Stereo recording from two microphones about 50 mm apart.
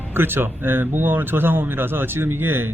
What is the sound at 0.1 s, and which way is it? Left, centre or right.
Speech, right.